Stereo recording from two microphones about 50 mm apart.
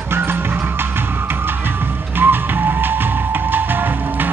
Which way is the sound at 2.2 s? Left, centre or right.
Right.